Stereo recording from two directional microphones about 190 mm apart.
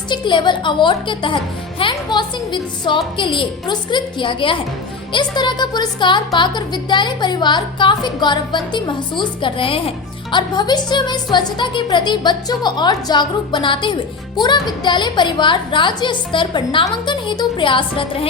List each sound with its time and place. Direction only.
0.1 s a woman's voice: 25° left (ahead or behind)